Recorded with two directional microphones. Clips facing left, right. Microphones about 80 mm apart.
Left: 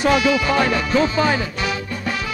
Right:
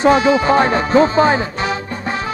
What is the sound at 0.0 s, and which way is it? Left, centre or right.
Music, right.